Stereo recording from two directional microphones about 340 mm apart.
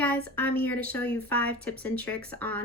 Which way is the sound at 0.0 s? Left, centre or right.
Centre.